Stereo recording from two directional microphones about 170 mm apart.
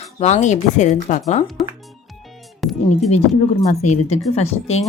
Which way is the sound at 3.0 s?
40° left (ahead or behind).